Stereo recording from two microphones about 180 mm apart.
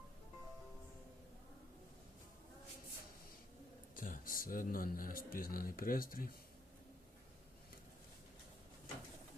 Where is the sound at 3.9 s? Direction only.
50° left (ahead or behind).